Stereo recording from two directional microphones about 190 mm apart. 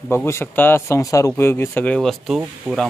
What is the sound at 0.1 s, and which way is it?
Speech, 15° left (ahead or behind).